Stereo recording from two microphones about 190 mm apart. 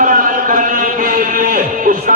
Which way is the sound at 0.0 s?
45° right (ahead or behind).